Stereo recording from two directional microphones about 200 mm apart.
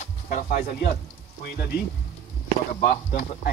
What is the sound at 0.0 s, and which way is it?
Speech, 45° left (ahead or behind).